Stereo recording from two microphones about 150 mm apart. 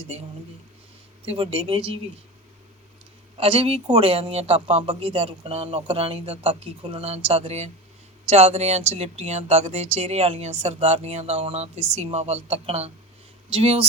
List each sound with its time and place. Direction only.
1.2 s speech: 40° right (ahead or behind)
3.3 s a woman's voice: 40° right (ahead or behind)